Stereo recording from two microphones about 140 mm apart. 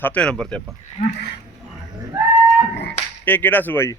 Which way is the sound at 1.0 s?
55° left (ahead or behind).